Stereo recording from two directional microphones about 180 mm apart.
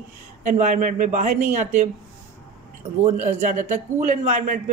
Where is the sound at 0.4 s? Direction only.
45° right (ahead or behind).